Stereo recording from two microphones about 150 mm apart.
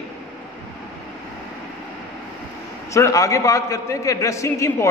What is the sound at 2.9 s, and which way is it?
A man's voice, 20° left (ahead or behind).